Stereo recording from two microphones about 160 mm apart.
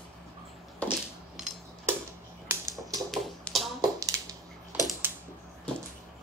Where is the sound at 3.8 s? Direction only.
20° right (ahead or behind).